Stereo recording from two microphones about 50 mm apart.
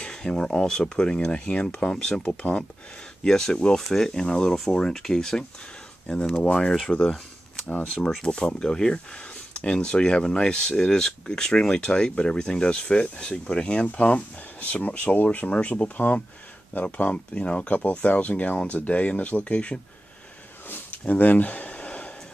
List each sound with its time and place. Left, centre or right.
0.0 s speech: centre
2.2 s speech: left
3.3 s speech: centre
6.9 s speech: left
8.2 s speech: centre
20.6 s a sound: left